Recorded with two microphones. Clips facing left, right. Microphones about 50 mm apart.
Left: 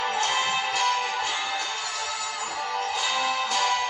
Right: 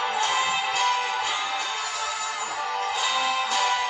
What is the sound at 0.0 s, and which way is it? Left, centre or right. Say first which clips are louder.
Music: right 1 dB; centre.